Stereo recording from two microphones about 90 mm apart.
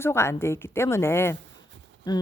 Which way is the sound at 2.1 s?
50° left (ahead or behind).